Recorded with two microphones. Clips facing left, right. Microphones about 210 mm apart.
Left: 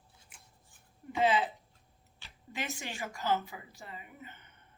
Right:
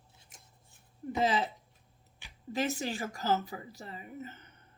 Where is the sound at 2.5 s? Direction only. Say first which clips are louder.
Right 8 dB; 40° right (ahead or behind).